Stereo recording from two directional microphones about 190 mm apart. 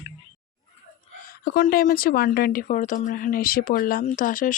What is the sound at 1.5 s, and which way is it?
Speech, 45° left (ahead or behind).